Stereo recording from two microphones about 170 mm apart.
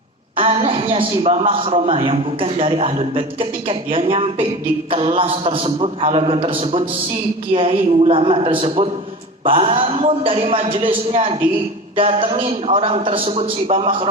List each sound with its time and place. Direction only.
0.3 s a man's voice: 30° right (ahead or behind)